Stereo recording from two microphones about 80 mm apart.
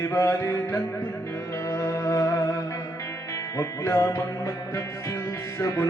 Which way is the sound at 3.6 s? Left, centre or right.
Left.